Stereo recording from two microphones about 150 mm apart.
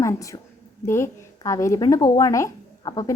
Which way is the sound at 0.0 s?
20° left (ahead or behind).